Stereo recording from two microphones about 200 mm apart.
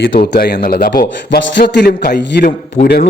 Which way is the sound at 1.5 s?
60° left (ahead or behind).